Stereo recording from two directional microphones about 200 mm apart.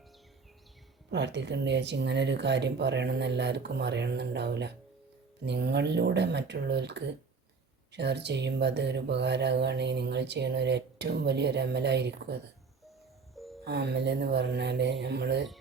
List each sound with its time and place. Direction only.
1.1 s speech: 60° right (ahead or behind)
13.3 s music: centre (ahead or behind)
13.7 s speech: 55° right (ahead or behind)